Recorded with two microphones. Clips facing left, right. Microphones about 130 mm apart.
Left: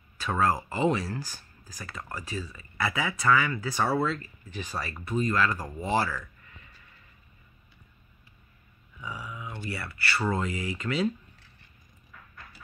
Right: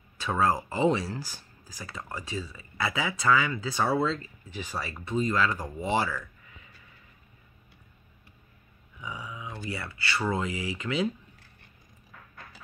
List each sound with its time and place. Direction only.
0.2 s speech: 15° right (ahead or behind)
9.0 s speech: 15° right (ahead or behind)